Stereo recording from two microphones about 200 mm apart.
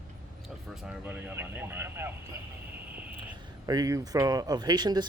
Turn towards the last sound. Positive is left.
turn(degrees=-20)  # may be behind; listen again after turning